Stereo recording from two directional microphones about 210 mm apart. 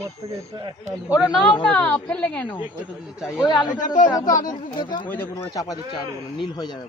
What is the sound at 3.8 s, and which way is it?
Speech, 40° left (ahead or behind).